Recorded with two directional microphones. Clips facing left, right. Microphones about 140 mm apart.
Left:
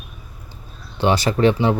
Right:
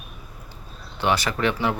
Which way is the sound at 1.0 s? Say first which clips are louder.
Left 6 dB; 30° left (ahead or behind).